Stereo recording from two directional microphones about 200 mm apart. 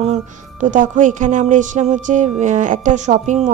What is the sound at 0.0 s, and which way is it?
A woman's voice, 35° right (ahead or behind).